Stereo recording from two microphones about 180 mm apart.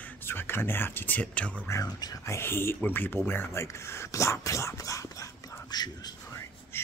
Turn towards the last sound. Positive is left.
turn(degrees=15)  # may be behind; listen again after turning